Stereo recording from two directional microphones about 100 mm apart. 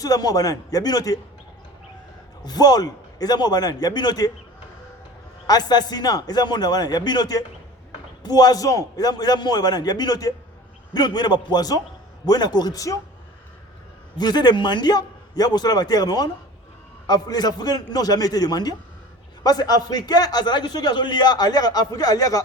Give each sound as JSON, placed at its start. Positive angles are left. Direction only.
{"t": 0.0, "sound": "a man's voice", "side_deg": 40}
{"t": 2.4, "sound": "a man's voice", "side_deg": 40}
{"t": 5.5, "sound": "a man's voice", "side_deg": 45}
{"t": 14.2, "sound": "a man's voice", "side_deg": 45}